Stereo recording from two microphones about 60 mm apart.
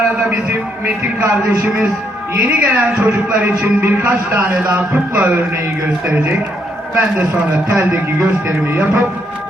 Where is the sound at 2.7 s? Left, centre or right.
Right.